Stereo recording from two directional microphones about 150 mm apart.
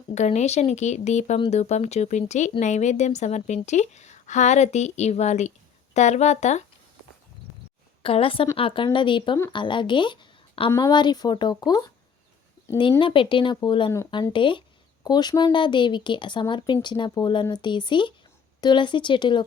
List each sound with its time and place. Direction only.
0.1 s a woman's voice: 50° left (ahead or behind)
8.0 s a woman's voice: 40° left (ahead or behind)